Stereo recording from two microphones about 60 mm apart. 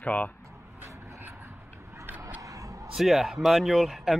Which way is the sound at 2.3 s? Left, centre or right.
Right.